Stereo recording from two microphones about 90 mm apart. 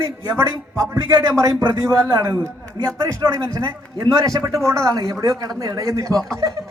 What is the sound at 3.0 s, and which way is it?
A woman's voice, 40° right (ahead or behind).